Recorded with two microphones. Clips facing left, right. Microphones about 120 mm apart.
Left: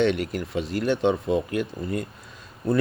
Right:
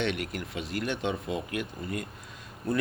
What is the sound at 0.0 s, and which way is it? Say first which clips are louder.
A man's voice: left 8 dB; 30° left (ahead or behind).